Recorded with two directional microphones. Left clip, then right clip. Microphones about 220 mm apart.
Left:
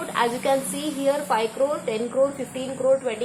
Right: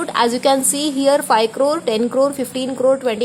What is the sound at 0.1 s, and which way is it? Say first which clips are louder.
A woman's voice: right 6 dB; 45° right (ahead or behind).